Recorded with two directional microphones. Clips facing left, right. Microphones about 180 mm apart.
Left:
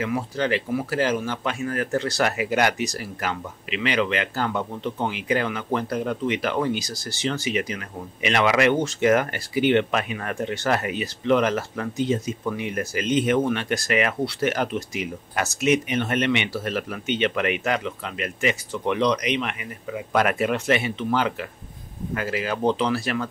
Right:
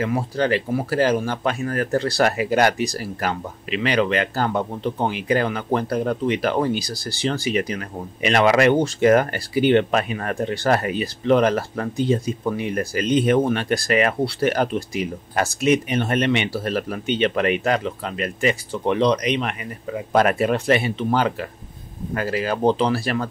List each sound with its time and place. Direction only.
0.0 s speech: 35° right (ahead or behind)